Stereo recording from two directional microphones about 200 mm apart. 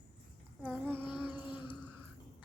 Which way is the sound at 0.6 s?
5° right (ahead or behind).